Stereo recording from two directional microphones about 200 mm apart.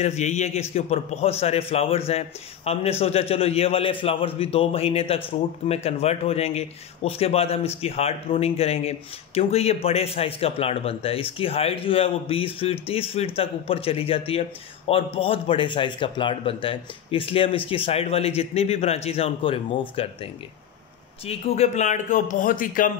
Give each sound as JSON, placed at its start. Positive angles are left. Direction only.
{"t": 0.0, "sound": "a man's voice", "side_deg": 35}
{"t": 21.3, "sound": "a man's voice", "side_deg": 30}